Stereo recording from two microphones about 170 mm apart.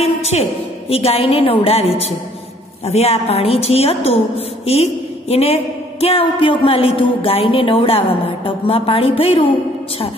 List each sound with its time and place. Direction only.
0.0 s speech: 35° left (ahead or behind)
5.3 s speech: 35° left (ahead or behind)